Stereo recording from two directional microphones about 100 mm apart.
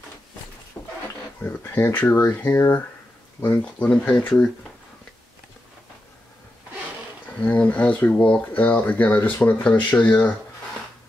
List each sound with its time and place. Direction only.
0.8 s a sound: 15° left (ahead or behind)
1.4 s speech: 20° left (ahead or behind)
2.5 s speech: 35° left (ahead or behind)
3.3 s speech: 20° left (ahead or behind)
7.4 s speech: 15° left (ahead or behind)